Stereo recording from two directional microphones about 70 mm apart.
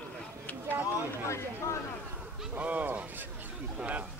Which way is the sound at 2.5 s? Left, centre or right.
Right.